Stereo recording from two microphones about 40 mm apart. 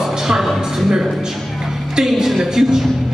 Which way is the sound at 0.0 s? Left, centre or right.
Centre.